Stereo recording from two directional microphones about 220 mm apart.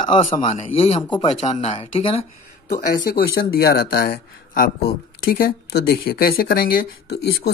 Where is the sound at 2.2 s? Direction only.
35° left (ahead or behind).